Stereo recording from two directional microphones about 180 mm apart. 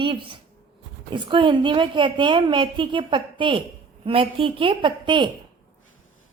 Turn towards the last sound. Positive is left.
turn(degrees=-25)  # may be behind; listen again after turning